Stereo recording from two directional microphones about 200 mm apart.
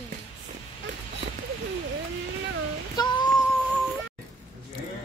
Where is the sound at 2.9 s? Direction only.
20° left (ahead or behind).